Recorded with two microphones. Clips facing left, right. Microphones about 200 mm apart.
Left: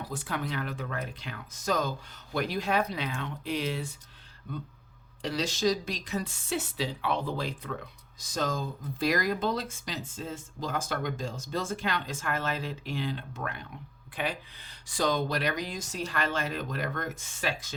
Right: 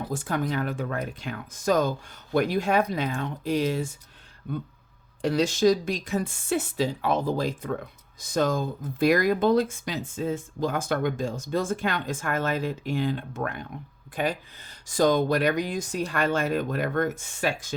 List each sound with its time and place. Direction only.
0.1 s speech: 45° right (ahead or behind)
5.2 s speech: 50° right (ahead or behind)